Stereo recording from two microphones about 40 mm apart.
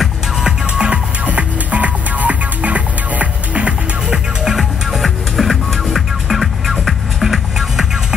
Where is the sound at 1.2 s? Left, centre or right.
Right.